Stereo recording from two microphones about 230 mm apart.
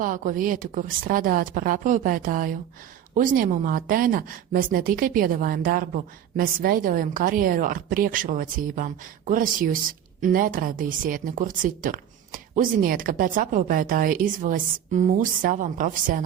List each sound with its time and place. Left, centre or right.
0.0 s a woman's voice: right